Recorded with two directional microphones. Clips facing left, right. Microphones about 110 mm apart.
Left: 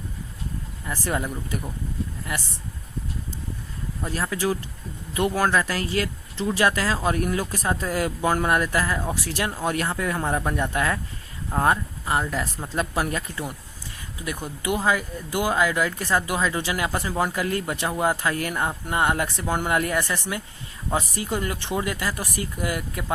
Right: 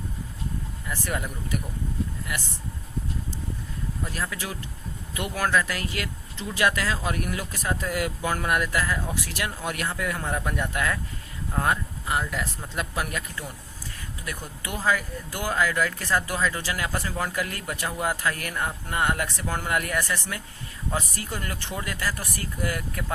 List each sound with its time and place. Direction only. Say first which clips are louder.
0.9 s speech: left 4 dB; 30° left (ahead or behind)
4.1 s speech: left 11 dB; 30° left (ahead or behind)